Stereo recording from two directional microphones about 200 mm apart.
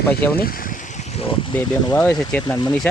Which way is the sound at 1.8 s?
10° left (ahead or behind).